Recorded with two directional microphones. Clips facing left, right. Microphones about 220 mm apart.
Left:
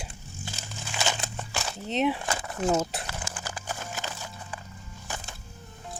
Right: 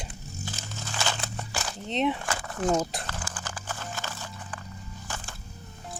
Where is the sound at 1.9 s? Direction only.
5° left (ahead or behind).